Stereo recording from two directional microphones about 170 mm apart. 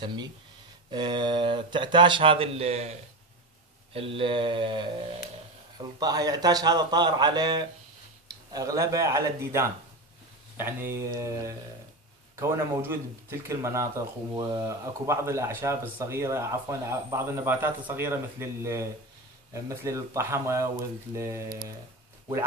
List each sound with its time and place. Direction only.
0.0 s speech: 25° right (ahead or behind)
3.9 s mantra: 35° right (ahead or behind)
5.8 s speech: 25° right (ahead or behind)